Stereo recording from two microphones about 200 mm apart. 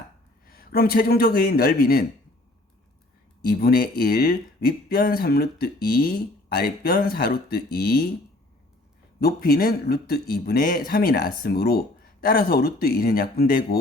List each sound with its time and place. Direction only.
0.4 s speech: 50° left (ahead or behind)
3.4 s speech: 50° left (ahead or behind)
9.2 s speech: 50° left (ahead or behind)